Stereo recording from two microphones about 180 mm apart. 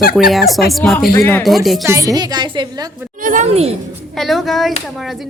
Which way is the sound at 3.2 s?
45° right (ahead or behind).